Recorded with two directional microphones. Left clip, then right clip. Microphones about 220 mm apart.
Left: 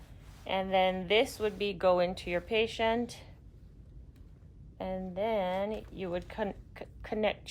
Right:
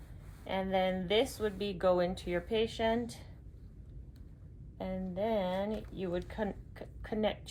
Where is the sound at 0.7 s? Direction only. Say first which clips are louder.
Left 4 dB; 45° left (ahead or behind).